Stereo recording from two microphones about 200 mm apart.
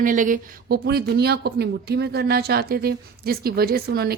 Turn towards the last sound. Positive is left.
turn(degrees=-50)  # may be behind; listen again after turning